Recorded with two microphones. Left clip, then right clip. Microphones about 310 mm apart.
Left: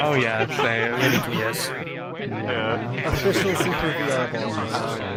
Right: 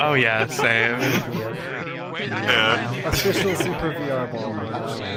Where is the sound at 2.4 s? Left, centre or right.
Right.